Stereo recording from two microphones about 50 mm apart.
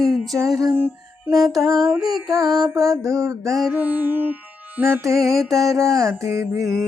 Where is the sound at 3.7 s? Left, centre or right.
Right.